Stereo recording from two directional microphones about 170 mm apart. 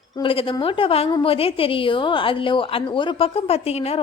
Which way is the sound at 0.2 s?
30° left (ahead or behind).